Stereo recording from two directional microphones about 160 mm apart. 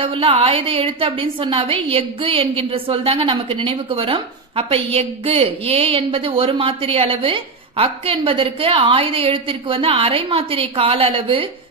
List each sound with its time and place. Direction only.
0.0 s a woman's voice: 35° right (ahead or behind)